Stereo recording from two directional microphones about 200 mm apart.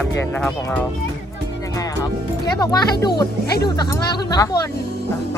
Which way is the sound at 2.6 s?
20° left (ahead or behind).